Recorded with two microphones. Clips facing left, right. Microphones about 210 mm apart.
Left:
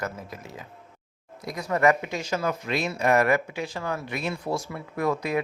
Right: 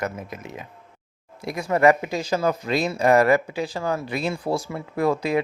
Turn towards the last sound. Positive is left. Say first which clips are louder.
# right 4 dB
turn(degrees=-30)  # may be behind; listen again after turning